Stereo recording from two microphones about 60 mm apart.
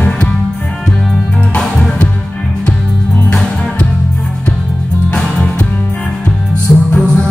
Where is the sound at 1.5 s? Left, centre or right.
Centre.